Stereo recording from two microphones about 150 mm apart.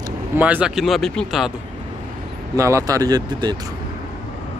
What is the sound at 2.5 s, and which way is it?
Speech, 20° right (ahead or behind).